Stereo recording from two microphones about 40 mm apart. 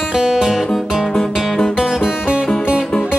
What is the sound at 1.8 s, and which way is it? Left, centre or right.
Music, centre.